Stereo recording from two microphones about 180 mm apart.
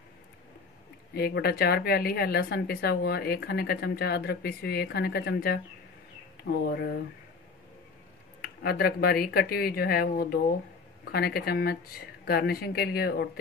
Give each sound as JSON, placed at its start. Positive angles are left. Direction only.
{"t": 1.1, "sound": "a woman's voice", "side_deg": 60}
{"t": 8.4, "sound": "a woman's voice", "side_deg": 60}